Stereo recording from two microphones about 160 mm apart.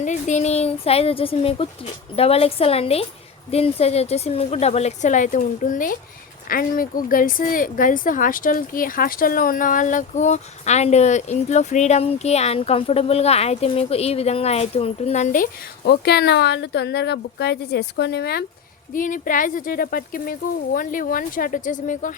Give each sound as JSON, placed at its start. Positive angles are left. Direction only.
{"t": 0.0, "sound": "a woman's voice", "side_deg": 50}
{"t": 15.9, "sound": "a woman's voice", "side_deg": 90}
{"t": 18.9, "sound": "speech", "side_deg": 55}